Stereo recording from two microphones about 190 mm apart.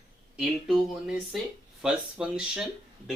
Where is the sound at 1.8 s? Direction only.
5° right (ahead or behind).